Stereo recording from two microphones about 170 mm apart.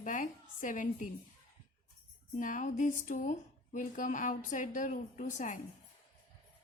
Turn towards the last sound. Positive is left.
turn(degrees=50)  # may be behind; listen again after turning